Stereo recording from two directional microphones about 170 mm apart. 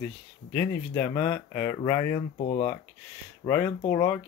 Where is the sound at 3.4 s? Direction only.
10° left (ahead or behind).